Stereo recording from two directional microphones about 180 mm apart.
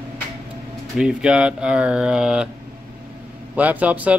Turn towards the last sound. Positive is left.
turn(degrees=-10)  # may be behind; listen again after turning